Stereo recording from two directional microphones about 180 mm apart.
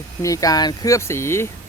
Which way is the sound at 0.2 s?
20° left (ahead or behind).